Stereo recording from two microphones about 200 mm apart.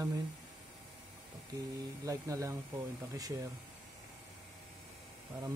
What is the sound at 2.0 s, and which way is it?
Speech, 15° right (ahead or behind).